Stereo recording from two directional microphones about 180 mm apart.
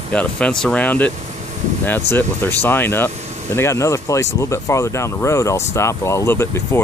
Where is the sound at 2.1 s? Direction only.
10° left (ahead or behind).